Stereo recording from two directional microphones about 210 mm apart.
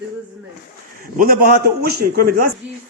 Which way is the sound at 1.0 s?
45° right (ahead or behind).